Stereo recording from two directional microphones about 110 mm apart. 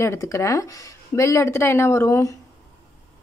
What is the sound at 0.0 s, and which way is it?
Speech, 25° left (ahead or behind).